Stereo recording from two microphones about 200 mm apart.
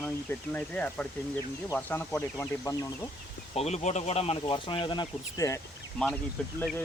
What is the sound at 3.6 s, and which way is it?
Speech, 35° left (ahead or behind).